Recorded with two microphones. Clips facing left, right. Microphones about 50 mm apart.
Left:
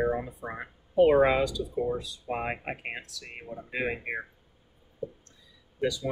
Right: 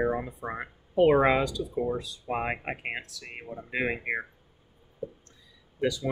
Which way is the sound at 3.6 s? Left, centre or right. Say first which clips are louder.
Right 2 dB; right.